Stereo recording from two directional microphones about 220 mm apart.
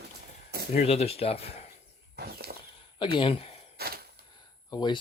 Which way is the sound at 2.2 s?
45° right (ahead or behind).